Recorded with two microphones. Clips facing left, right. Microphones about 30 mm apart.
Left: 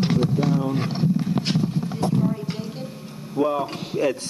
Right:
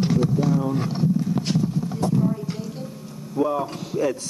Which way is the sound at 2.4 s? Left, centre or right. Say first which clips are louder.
Even; left.